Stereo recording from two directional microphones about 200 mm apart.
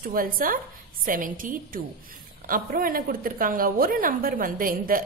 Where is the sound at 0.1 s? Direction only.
45° right (ahead or behind).